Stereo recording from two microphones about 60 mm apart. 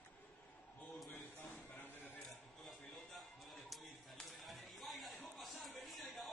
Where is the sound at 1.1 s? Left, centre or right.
Left.